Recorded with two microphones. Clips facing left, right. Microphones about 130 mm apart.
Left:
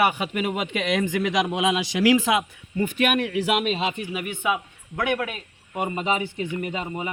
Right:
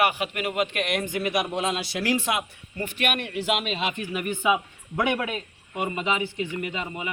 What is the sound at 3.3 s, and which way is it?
Speech, 90° left.